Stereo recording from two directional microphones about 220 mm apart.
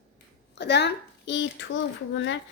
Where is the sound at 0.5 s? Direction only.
50° left (ahead or behind).